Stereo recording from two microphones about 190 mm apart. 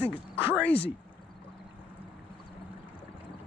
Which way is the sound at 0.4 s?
10° right (ahead or behind).